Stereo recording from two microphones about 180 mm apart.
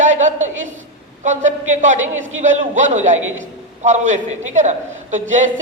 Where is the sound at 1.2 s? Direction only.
45° right (ahead or behind).